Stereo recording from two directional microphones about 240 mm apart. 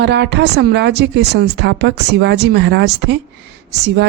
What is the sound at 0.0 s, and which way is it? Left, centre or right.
A woman's voice, right.